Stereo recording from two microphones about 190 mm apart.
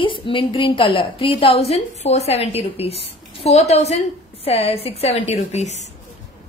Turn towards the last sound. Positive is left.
turn(degrees=35)  # may be behind; listen again after turning